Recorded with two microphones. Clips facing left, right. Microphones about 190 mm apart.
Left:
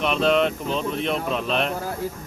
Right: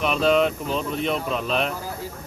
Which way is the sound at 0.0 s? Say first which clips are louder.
Even; centre (ahead or behind).